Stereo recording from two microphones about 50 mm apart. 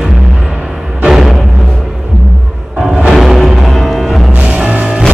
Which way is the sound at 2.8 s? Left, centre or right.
Centre.